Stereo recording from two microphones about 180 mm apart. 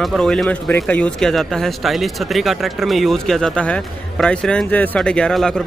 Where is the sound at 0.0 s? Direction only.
Centre (ahead or behind).